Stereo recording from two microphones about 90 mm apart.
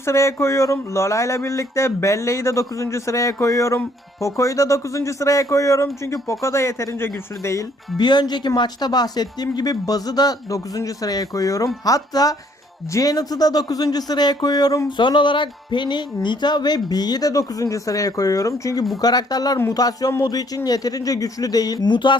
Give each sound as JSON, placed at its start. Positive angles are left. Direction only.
{"t": 0.0, "sound": "speech", "side_deg": 35}
{"t": 7.9, "sound": "speech", "side_deg": 55}
{"t": 14.8, "sound": "speech", "side_deg": 60}